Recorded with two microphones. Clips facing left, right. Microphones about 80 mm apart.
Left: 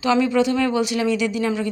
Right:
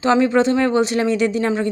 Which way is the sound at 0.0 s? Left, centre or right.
Right.